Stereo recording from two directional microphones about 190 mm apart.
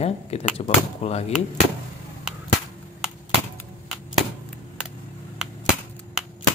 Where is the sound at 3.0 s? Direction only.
Centre (ahead or behind).